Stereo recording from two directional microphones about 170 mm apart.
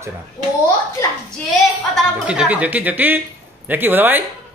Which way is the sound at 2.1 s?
5° right (ahead or behind).